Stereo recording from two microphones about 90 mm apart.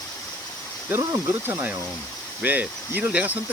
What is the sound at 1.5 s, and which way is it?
Speech, 20° right (ahead or behind).